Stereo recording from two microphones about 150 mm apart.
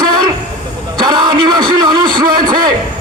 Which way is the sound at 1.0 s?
30° right (ahead or behind).